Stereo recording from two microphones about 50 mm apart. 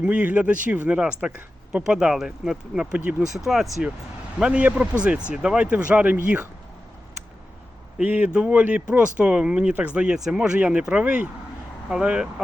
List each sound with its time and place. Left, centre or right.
0.0 s speech: right
3.3 s speech: centre
4.4 s speech: centre
8.0 s speech: right
10.6 s speech: right